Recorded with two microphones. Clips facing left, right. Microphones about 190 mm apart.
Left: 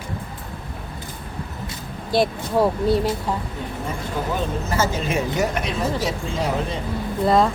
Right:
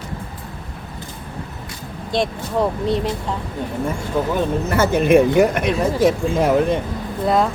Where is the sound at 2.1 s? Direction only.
5° left (ahead or behind).